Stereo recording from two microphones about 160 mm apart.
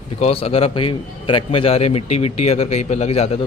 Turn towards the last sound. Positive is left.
turn(degrees=40)  # may be behind; listen again after turning